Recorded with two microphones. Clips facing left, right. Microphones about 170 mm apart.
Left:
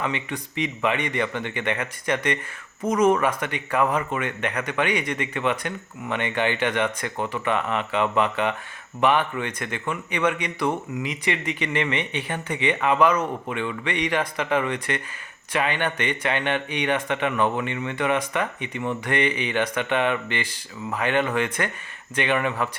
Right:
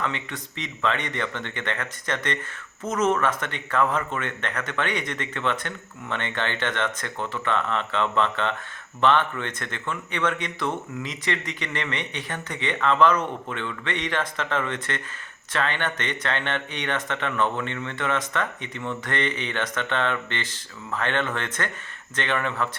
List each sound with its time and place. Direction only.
0.0 s speech: 15° left (ahead or behind)